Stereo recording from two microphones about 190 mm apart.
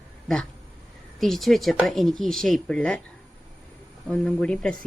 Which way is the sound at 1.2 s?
Centre (ahead or behind).